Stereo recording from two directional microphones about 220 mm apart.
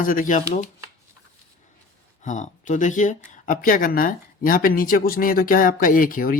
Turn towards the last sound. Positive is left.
turn(degrees=40)  # may be behind; listen again after turning